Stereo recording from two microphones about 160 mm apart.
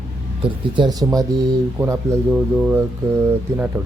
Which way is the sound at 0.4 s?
30° right (ahead or behind).